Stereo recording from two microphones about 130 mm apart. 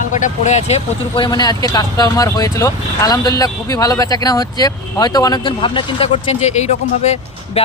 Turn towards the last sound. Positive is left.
turn(degrees=60)  # may be behind; listen again after turning